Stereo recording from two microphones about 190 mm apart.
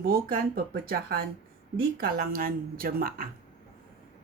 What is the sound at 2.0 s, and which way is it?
A woman's voice, 50° right (ahead or behind).